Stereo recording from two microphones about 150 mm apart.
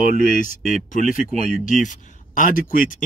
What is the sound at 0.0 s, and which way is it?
Speech, 60° left (ahead or behind).